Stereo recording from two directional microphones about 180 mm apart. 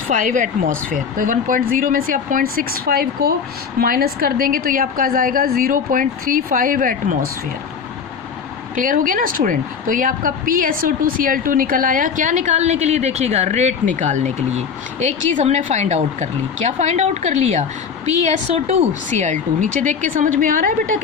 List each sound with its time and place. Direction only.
0.1 s a woman's voice: 45° right (ahead or behind)
8.7 s a woman's voice: 50° right (ahead or behind)